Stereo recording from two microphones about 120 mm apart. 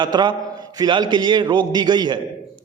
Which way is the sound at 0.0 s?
40° right (ahead or behind).